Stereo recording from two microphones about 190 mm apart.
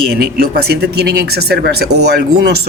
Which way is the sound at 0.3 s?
55° right (ahead or behind).